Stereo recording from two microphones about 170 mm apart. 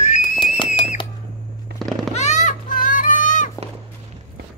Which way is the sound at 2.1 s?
45° left (ahead or behind).